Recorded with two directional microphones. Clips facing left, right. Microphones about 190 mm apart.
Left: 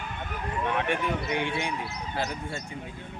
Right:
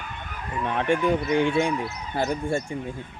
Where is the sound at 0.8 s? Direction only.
45° right (ahead or behind).